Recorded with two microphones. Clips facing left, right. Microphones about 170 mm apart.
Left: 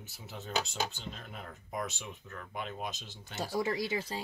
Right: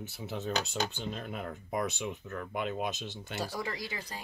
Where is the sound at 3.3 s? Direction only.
25° left (ahead or behind).